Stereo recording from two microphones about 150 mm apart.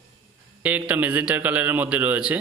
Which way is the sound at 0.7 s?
10° right (ahead or behind).